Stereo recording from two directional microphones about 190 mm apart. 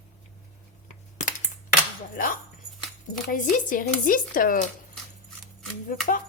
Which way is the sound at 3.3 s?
45° left (ahead or behind).